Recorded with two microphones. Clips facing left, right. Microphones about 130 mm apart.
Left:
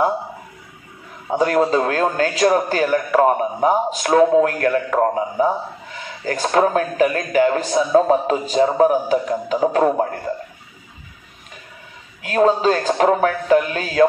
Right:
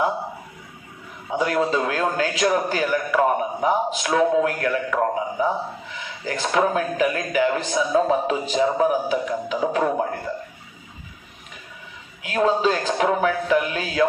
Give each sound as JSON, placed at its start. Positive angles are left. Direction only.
{"t": 1.4, "sound": "a man's voice", "side_deg": 45}
{"t": 12.2, "sound": "a man's voice", "side_deg": 40}